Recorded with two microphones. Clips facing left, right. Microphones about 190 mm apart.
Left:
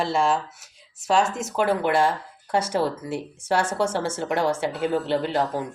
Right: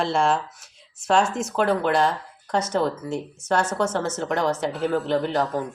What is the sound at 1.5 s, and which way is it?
Speech, 10° left (ahead or behind).